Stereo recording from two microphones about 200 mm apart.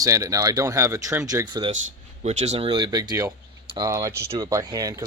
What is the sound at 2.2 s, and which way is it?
Speech, 35° right (ahead or behind).